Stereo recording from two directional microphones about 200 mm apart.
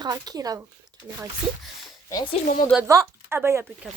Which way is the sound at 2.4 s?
40° left (ahead or behind).